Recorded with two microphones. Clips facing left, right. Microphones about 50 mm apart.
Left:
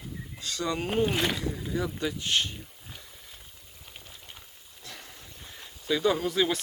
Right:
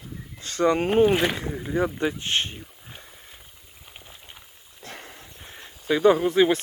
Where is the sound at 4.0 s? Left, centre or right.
Centre.